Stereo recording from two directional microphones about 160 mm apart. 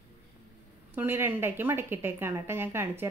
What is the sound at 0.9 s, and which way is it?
A woman's voice, 15° right (ahead or behind).